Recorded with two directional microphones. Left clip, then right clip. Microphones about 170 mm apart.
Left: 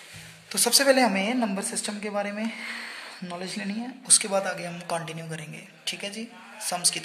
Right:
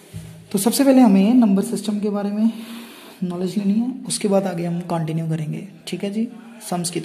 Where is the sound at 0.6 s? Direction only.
10° right (ahead or behind).